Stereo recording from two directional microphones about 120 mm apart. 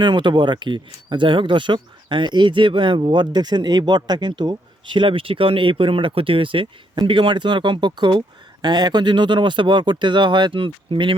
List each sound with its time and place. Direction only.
0.0 s speech: 40° right (ahead or behind)